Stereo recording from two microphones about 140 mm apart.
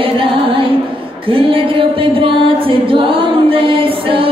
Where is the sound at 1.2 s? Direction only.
40° right (ahead or behind).